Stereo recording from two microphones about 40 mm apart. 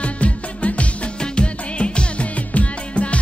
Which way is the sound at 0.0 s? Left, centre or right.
Left.